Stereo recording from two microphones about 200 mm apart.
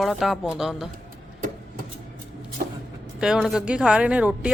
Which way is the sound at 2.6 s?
45° right (ahead or behind).